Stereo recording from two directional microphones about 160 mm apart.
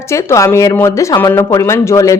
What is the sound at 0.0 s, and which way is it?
Speech, 15° left (ahead or behind).